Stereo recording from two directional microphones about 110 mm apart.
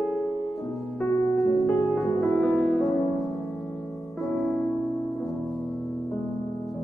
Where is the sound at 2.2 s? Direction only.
Centre (ahead or behind).